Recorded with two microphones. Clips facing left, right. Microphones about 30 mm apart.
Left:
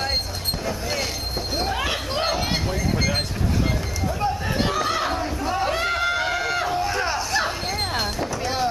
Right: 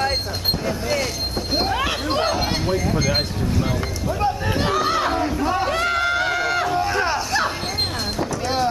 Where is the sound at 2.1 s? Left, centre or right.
Centre.